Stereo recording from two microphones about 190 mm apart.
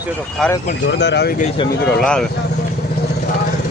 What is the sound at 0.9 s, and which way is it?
Speech, 65° left (ahead or behind).